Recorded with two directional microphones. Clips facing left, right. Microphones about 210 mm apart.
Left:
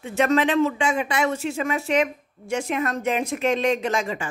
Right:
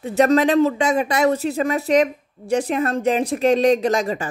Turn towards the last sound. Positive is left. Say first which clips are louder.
# right 5 dB
turn(degrees=-40)  # may be behind; listen again after turning